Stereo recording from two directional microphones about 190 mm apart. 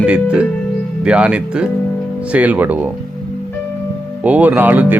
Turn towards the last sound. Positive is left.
turn(degrees=-10)  # may be behind; listen again after turning